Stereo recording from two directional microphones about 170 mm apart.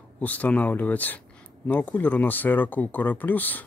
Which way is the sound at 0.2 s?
10° left (ahead or behind).